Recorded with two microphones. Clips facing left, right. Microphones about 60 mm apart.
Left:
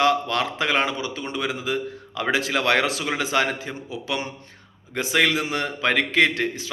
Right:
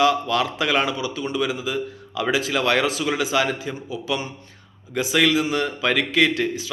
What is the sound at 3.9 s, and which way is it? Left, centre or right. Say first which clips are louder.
Speech: right 2 dB; left.